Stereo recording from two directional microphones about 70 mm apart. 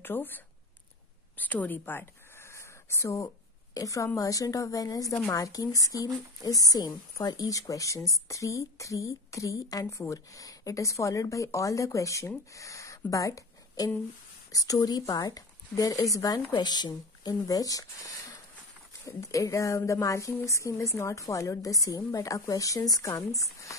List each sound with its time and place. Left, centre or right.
0.0 s speech: left
1.3 s a sound: left
3.7 s a woman's voice: left
15.7 s speech: left
16.6 s a woman's voice: left